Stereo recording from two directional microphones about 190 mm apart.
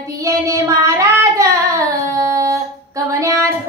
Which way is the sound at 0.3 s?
15° right (ahead or behind).